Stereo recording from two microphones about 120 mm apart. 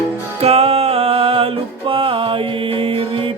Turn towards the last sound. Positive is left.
turn(degrees=-45)  # may be behind; listen again after turning